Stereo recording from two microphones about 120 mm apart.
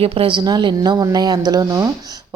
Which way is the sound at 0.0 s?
50° right (ahead or behind).